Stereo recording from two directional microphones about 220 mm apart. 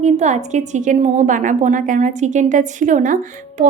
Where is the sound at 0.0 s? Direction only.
30° right (ahead or behind).